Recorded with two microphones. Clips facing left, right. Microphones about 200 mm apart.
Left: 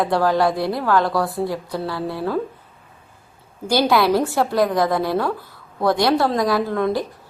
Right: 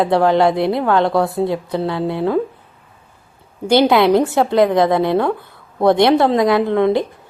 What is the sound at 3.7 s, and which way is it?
A woman's voice, 25° right (ahead or behind).